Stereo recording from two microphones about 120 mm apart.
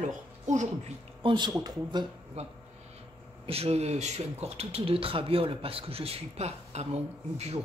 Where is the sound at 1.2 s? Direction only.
40° right (ahead or behind).